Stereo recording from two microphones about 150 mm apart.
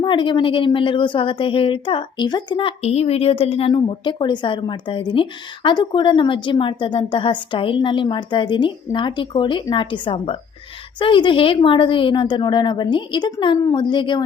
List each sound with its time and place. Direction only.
0.0 s speech: 30° left (ahead or behind)
3.8 s speech: 30° left (ahead or behind)